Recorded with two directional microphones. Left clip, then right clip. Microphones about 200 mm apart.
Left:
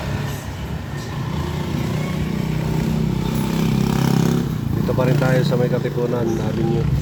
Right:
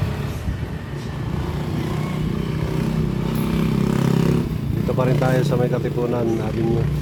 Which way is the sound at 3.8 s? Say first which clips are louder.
Even; 35° left (ahead or behind).